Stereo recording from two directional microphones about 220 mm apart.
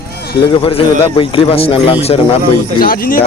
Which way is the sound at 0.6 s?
25° left (ahead or behind).